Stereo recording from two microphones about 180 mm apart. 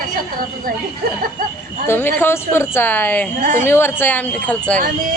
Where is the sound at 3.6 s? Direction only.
10° left (ahead or behind).